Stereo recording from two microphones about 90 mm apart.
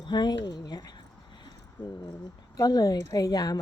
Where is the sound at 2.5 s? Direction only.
45° left (ahead or behind).